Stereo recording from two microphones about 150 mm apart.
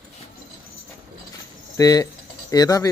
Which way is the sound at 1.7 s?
25° left (ahead or behind).